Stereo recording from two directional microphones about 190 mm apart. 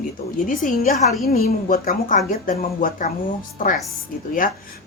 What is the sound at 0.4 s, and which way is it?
A woman's voice, 45° left (ahead or behind).